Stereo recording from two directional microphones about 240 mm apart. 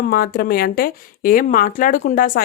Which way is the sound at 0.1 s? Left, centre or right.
Left.